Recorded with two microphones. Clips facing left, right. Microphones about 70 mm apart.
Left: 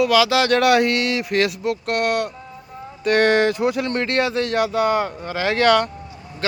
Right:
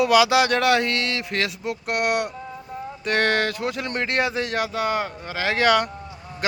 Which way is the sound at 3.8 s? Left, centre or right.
Centre.